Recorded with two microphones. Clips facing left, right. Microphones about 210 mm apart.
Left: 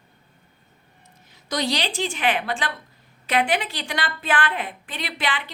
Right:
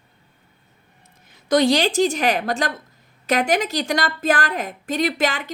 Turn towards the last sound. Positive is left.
turn(degrees=-45)  # may be behind; listen again after turning